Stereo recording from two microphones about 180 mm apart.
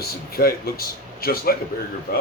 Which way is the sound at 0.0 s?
60° left (ahead or behind).